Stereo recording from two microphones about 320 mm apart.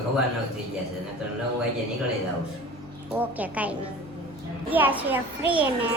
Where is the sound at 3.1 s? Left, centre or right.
Centre.